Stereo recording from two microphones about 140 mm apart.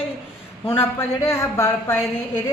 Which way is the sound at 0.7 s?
20° left (ahead or behind).